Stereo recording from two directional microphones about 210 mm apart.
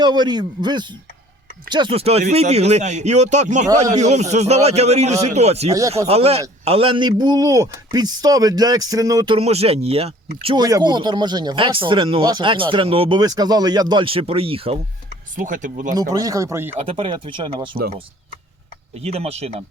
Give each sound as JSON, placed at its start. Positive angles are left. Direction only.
{"t": 0.0, "sound": "a man's voice", "side_deg": -20}
{"t": 15.4, "sound": "speech", "side_deg": -40}
{"t": 16.0, "sound": "speech", "side_deg": -15}
{"t": 16.8, "sound": "a man's voice", "side_deg": -25}
{"t": 17.7, "sound": "speech", "side_deg": -45}
{"t": 18.9, "sound": "a man's voice", "side_deg": -30}